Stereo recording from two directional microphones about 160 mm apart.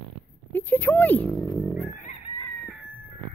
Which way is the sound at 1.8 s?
50° left (ahead or behind).